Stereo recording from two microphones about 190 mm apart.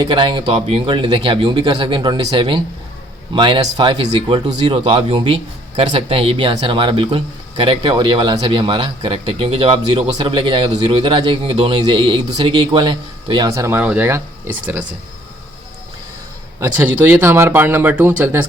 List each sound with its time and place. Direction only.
0.0 s speech: 25° right (ahead or behind)
16.6 s speech: 10° right (ahead or behind)